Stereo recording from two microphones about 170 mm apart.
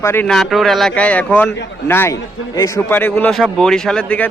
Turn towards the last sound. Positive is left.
turn(degrees=10)  # may be behind; listen again after turning